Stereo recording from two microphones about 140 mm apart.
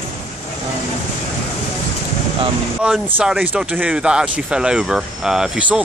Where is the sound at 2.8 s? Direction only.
5° right (ahead or behind).